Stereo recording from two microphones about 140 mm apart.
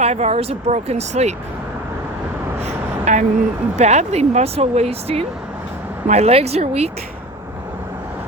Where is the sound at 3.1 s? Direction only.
55° right (ahead or behind).